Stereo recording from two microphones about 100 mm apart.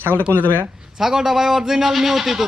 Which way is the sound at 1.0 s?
5° right (ahead or behind).